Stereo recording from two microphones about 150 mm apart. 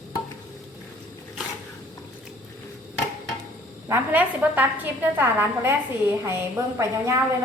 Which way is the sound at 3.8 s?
15° right (ahead or behind).